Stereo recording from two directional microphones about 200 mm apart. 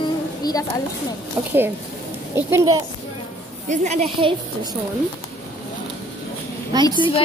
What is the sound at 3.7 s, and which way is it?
A woman's voice, 35° right (ahead or behind).